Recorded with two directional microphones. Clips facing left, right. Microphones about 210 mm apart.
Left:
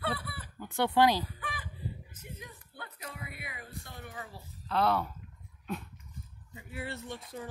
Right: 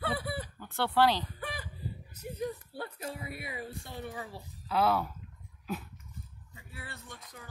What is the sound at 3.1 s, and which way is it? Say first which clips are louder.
Speech: right 5 dB; 25° right (ahead or behind).